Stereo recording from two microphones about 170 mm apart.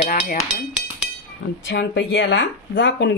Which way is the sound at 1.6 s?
90° left.